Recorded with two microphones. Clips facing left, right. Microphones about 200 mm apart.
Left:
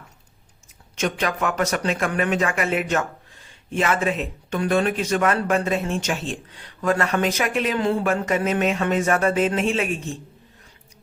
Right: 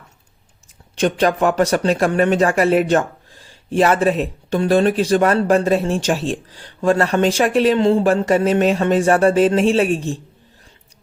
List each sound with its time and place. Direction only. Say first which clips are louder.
0.9 s speech: right 7 dB; 30° right (ahead or behind)